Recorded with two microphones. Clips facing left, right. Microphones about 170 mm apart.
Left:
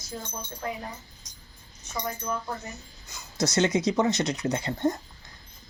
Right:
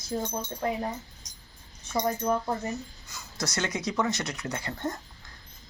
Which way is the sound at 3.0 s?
20° left (ahead or behind).